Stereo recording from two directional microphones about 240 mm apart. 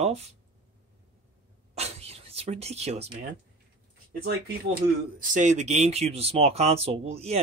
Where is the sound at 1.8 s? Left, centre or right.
Right.